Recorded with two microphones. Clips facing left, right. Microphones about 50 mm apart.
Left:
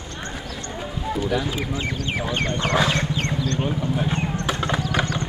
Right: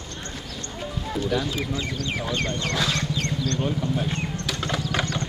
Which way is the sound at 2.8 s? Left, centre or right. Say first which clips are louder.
Left 4 dB; left.